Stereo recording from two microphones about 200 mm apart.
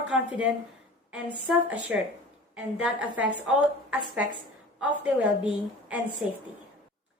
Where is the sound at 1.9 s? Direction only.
5° right (ahead or behind).